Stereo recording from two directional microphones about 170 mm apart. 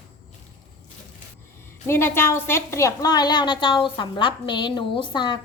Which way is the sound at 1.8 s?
15° left (ahead or behind).